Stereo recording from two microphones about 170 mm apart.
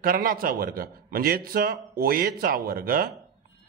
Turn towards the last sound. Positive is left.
turn(degrees=-55)  # may be behind; listen again after turning